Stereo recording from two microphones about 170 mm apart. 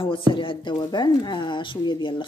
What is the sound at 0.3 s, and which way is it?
A woman's voice, 30° left (ahead or behind).